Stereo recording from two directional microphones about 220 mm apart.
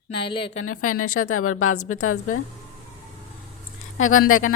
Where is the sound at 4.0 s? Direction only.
70° left (ahead or behind).